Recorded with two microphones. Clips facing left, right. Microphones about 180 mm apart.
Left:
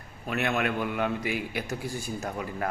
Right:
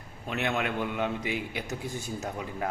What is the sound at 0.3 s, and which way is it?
A man's voice, 20° right (ahead or behind).